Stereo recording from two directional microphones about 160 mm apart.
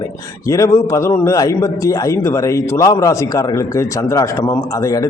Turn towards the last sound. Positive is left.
turn(degrees=20)  # may be behind; listen again after turning